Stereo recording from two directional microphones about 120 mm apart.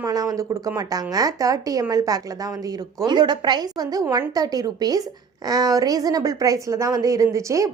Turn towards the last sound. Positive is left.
turn(degrees=-25)  # may be behind; listen again after turning